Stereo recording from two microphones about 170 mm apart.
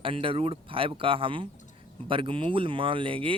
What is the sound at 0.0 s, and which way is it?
Speech, 30° right (ahead or behind).